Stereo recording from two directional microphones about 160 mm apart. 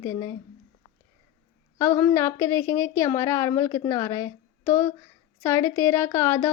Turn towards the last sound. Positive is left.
turn(degrees=15)  # may be behind; listen again after turning